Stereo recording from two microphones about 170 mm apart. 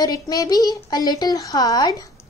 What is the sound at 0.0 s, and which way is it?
Speech, 20° left (ahead or behind).